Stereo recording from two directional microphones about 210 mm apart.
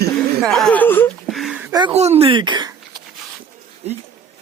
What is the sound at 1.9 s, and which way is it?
Speech, 30° right (ahead or behind).